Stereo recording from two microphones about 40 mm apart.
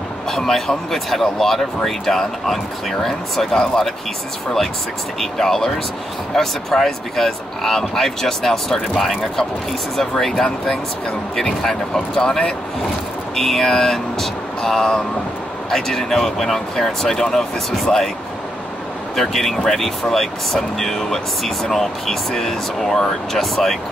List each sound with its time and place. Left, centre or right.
0.3 s speech: centre
5.4 s speech: centre
19.1 s speech: centre